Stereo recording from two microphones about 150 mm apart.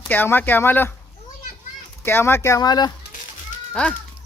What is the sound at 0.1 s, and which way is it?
Speech, 15° left (ahead or behind).